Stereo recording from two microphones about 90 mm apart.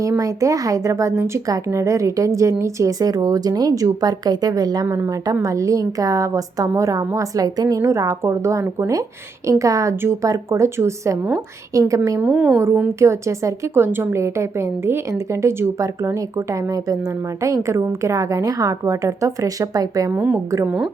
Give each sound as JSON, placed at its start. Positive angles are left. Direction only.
{"t": 0.2, "sound": "a woman's voice", "side_deg": -35}
{"t": 7.8, "sound": "a woman's voice", "side_deg": -35}
{"t": 12.2, "sound": "a woman's voice", "side_deg": -15}
{"t": 13.0, "sound": "a woman's voice", "side_deg": -35}
{"t": 20.1, "sound": "a woman's voice", "side_deg": -20}